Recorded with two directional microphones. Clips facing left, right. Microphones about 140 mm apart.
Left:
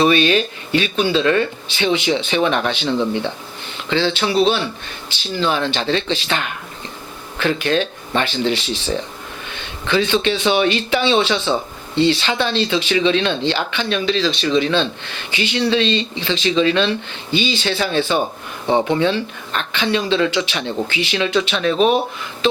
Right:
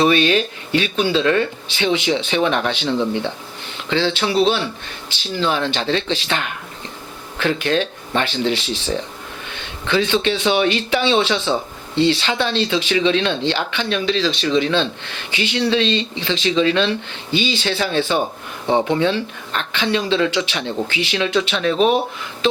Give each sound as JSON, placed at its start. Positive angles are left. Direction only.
{"t": 0.0, "sound": "speech", "side_deg": 10}
{"t": 2.9, "sound": "speech", "side_deg": 35}
{"t": 3.8, "sound": "speech", "side_deg": 10}
{"t": 9.8, "sound": "speech", "side_deg": 10}
{"t": 18.7, "sound": "speech", "side_deg": 25}